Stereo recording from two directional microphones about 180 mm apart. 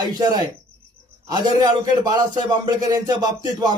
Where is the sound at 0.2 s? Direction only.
25° right (ahead or behind).